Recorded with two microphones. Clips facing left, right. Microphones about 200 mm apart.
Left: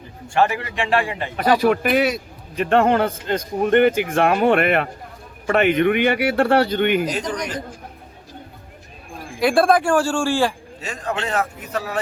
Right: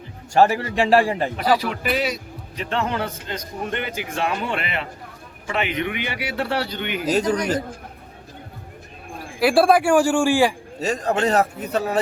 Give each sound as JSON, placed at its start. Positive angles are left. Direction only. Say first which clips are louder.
{"t": 0.3, "sound": "a man's voice", "louder": "right 3 dB", "side_deg": -40}
{"t": 1.6, "sound": "speech", "louder": "left 7 dB", "side_deg": 55}
{"t": 9.4, "sound": "a man's voice", "louder": "even", "side_deg": -5}
{"t": 10.8, "sound": "a man's voice", "louder": "right 8 dB", "side_deg": -40}